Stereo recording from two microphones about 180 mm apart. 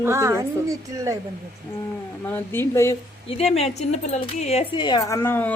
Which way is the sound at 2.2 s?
10° left (ahead or behind).